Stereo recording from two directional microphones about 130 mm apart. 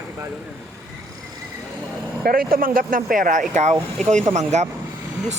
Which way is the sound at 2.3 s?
90° right.